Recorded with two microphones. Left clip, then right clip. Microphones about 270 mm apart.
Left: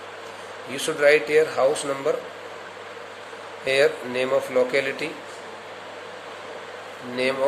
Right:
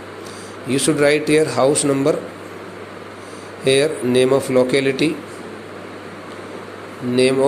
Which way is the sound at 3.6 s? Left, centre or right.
Centre.